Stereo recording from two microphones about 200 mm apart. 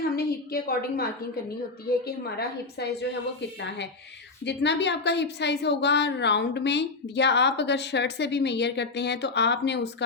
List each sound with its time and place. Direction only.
0.2 s a woman's voice: 50° left (ahead or behind)
2.7 s a woman's voice: 55° left (ahead or behind)